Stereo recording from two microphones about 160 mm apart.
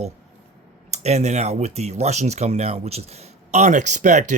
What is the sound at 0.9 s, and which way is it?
Speech, 45° right (ahead or behind).